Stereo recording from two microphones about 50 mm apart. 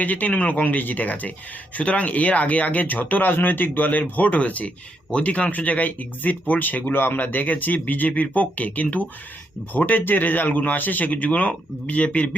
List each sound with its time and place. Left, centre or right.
0.0 s speech: left